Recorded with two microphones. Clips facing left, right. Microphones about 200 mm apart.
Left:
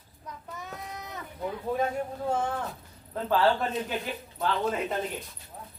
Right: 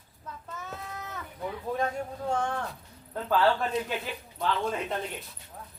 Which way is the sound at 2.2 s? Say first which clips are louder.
Even; 5° left (ahead or behind).